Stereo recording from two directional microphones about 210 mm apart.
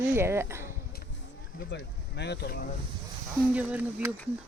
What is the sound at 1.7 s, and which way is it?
Speech, 55° left (ahead or behind).